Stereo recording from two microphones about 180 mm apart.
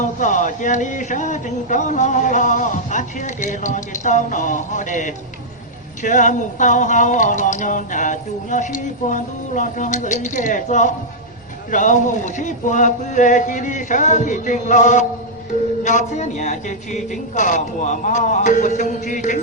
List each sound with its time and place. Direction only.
0.0 s speech: 45° left (ahead or behind)